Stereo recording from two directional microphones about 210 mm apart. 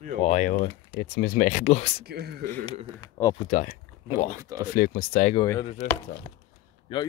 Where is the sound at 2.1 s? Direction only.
50° right (ahead or behind).